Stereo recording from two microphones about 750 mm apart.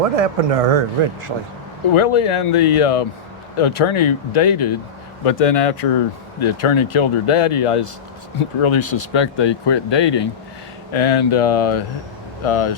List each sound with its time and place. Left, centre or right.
0.2 s speech: right
1.9 s speech: left